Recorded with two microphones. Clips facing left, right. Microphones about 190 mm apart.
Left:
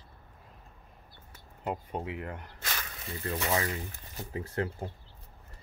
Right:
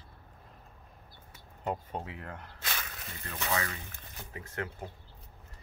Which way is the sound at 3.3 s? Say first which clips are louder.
Left 3 dB; 25° left (ahead or behind).